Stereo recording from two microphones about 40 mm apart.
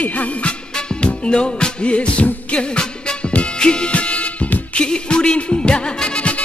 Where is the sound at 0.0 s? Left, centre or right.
Left.